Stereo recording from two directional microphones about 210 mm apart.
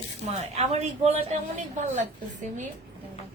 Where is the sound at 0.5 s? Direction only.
30° right (ahead or behind).